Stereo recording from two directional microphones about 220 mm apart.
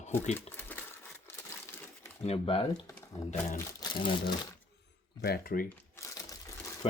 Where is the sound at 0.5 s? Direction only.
10° left (ahead or behind).